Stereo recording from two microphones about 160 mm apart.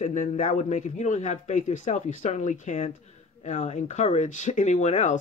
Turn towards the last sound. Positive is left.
turn(degrees=50)  # may be behind; listen again after turning